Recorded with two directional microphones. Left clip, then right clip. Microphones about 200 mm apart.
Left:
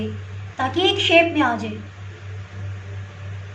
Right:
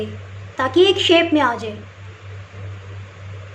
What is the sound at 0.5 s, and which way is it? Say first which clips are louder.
A woman's voice: right 5 dB; 45° right (ahead or behind).